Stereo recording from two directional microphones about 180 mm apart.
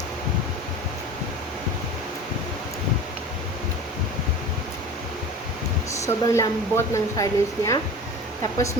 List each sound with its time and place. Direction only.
6.0 s speech: 15° left (ahead or behind)